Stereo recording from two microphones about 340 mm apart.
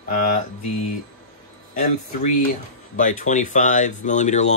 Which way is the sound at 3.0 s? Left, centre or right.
Left.